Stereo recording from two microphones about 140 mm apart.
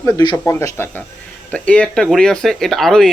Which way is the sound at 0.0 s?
25° left (ahead or behind).